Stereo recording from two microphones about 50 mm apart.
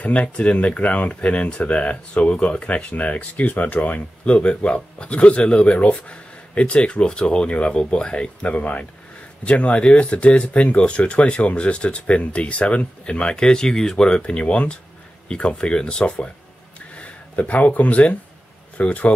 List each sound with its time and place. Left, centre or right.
0.0 s speech: left